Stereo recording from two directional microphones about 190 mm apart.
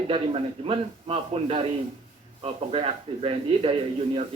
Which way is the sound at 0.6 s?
30° right (ahead or behind).